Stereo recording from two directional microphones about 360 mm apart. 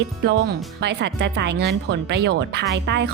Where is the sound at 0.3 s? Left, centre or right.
Right.